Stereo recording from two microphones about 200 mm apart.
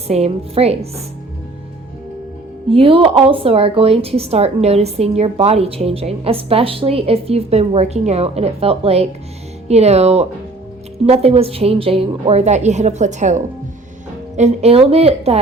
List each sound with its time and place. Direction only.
0.1 s a woman's voice: 30° right (ahead or behind)
2.6 s a woman's voice: 25° right (ahead or behind)